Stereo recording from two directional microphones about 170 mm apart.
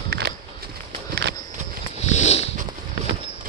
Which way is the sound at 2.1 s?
40° left (ahead or behind).